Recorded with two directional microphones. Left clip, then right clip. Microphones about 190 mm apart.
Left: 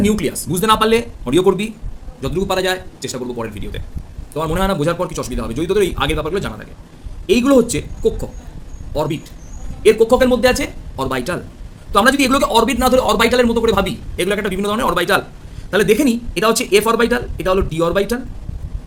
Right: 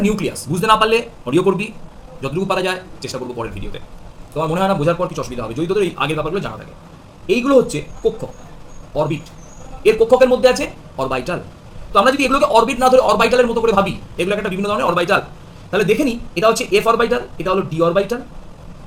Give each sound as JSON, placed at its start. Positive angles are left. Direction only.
{"t": 0.0, "sound": "a man's voice", "side_deg": 45}
{"t": 9.8, "sound": "speech", "side_deg": 45}